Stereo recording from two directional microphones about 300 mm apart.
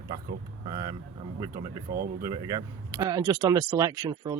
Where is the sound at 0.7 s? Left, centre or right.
Centre.